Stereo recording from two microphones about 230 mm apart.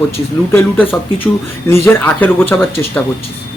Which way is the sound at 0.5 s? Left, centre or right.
Centre.